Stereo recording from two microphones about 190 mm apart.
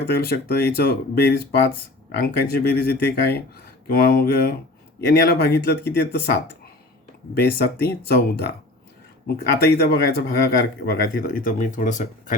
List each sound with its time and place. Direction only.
0.1 s speech: 55° left (ahead or behind)